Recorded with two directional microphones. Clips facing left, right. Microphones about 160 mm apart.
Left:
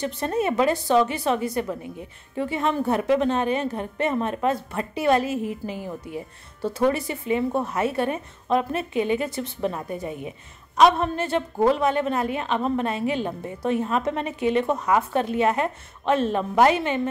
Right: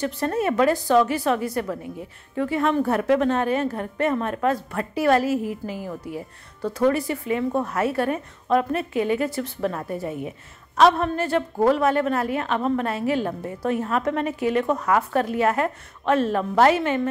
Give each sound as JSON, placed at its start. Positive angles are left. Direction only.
{"t": 0.0, "sound": "a woman's voice", "side_deg": 20}
{"t": 0.7, "sound": "a woman's voice", "side_deg": 0}
{"t": 1.0, "sound": "a woman's voice", "side_deg": 25}